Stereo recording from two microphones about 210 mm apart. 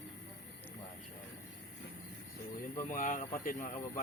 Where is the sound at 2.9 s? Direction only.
40° left (ahead or behind).